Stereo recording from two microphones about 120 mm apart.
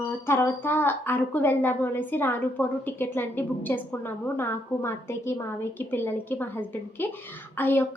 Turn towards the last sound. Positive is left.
turn(degrees=20)  # may be behind; listen again after turning